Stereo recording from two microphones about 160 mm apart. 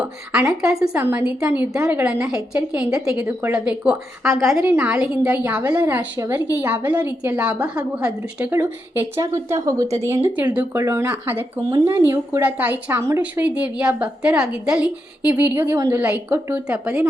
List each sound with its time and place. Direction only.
0.0 s speech: 10° right (ahead or behind)
5.6 s speech: 20° right (ahead or behind)